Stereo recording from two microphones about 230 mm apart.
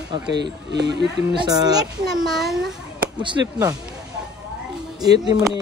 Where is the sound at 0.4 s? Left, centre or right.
Right.